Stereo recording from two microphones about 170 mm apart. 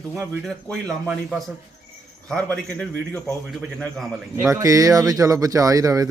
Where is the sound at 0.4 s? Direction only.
Centre (ahead or behind).